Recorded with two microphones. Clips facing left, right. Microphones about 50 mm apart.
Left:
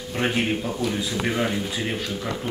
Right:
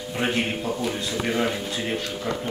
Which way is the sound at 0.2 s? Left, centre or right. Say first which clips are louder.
Left 2 dB; centre.